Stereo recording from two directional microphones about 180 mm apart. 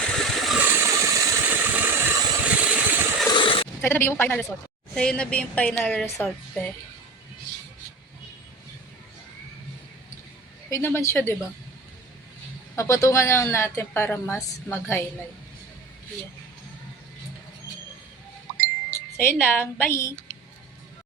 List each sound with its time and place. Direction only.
0.0 s a sound: centre (ahead or behind)
0.6 s vehicle: 10° right (ahead or behind)
2.4 s vehicle: 5° right (ahead or behind)
3.2 s a sound: 30° left (ahead or behind)
3.8 s a woman's voice: 10° left (ahead or behind)
10.7 s a woman's voice: 15° left (ahead or behind)
12.7 s a woman's voice: 15° left (ahead or behind)
19.2 s a woman's voice: 10° left (ahead or behind)